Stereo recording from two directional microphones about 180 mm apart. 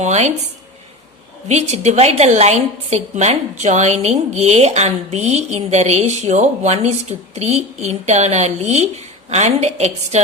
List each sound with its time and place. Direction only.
0.0 s a woman's voice: 40° right (ahead or behind)
1.5 s a woman's voice: 40° right (ahead or behind)